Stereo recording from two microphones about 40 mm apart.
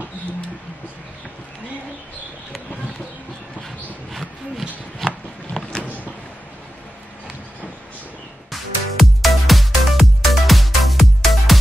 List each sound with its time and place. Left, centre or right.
4.1 s roaring cats: centre
5.5 s vehicle: left
8.5 s music: centre